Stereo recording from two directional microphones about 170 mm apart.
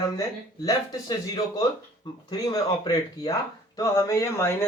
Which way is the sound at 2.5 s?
25° left (ahead or behind).